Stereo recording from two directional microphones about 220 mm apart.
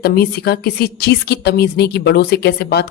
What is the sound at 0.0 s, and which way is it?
A woman's voice, 45° left (ahead or behind).